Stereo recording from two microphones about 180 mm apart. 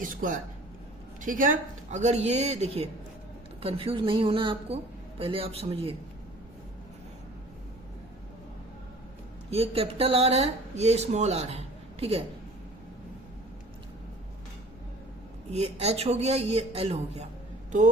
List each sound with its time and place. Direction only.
0.0 s speech: 50° right (ahead or behind); by 5.9 s 35° right (ahead or behind)
9.5 s speech: 35° right (ahead or behind)
15.4 s speech: 35° right (ahead or behind)